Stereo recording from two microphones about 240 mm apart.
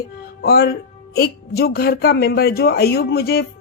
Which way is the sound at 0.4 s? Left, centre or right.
Left.